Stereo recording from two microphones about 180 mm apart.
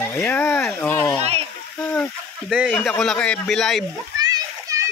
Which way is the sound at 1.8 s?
5° left (ahead or behind).